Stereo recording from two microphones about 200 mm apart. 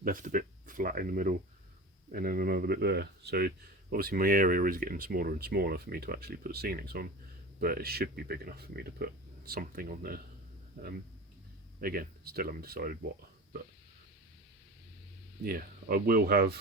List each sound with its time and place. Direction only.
0.0 s speech: 45° right (ahead or behind)
11.8 s speech: 50° right (ahead or behind)
15.4 s speech: 45° right (ahead or behind)